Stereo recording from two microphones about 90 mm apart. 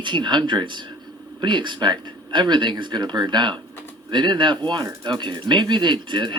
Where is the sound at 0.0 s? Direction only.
60° right (ahead or behind).